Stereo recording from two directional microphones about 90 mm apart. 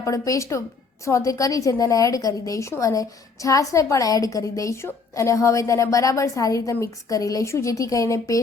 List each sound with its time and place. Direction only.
0.0 s a woman's voice: 35° left (ahead or behind)